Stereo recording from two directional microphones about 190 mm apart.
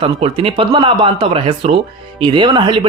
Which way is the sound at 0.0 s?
30° right (ahead or behind).